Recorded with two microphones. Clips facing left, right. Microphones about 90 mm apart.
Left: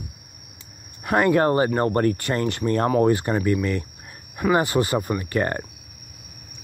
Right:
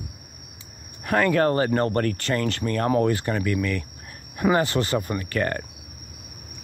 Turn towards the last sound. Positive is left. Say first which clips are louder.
# left 2 dB
turn(degrees=20)  # may be behind; listen again after turning